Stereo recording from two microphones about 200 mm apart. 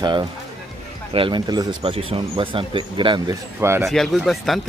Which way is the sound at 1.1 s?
25° right (ahead or behind).